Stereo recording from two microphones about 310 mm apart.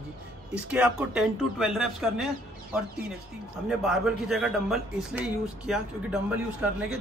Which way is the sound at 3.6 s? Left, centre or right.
Centre.